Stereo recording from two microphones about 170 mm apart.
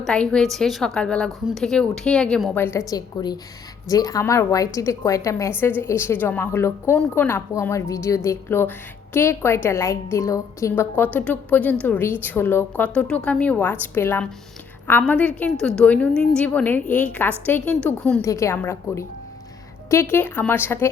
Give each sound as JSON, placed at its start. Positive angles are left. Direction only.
{"t": 0.0, "sound": "a woman's voice", "side_deg": 5}
{"t": 2.6, "sound": "a woman's voice", "side_deg": 15}
{"t": 18.2, "sound": "a woman's voice", "side_deg": 15}